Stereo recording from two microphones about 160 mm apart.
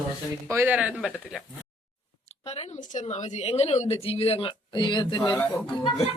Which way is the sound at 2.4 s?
40° left (ahead or behind).